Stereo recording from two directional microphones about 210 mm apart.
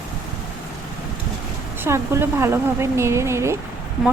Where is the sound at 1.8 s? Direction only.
10° right (ahead or behind).